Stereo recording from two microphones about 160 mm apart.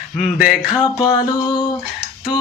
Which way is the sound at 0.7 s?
25° left (ahead or behind).